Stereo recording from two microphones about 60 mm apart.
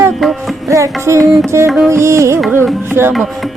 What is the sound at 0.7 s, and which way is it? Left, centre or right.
Music, right.